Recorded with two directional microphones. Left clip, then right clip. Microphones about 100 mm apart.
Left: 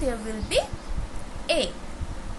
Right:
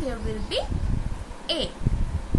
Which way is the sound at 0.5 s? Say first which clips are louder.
Left 4 dB; 30° left (ahead or behind).